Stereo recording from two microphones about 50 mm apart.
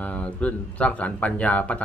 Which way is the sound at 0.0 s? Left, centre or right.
Left.